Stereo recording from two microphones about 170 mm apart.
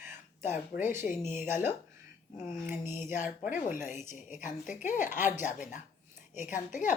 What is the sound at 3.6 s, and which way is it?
Speech, 45° left (ahead or behind).